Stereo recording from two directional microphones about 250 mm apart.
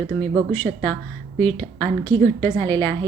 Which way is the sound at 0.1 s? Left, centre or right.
Centre.